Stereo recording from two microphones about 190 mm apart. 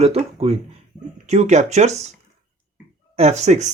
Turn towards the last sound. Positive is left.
turn(degrees=-35)  # may be behind; listen again after turning